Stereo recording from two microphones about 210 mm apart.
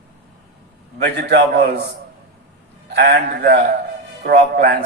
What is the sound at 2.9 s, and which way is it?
Speech, 55° right (ahead or behind).